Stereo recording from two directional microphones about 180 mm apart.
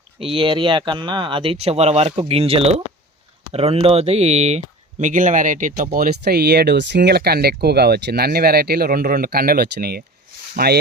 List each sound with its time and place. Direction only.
0.2 s speech: 30° right (ahead or behind); by 10.8 s 60° right (ahead or behind)